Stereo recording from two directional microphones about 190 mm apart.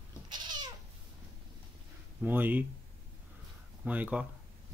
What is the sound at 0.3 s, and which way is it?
Cat, 25° right (ahead or behind).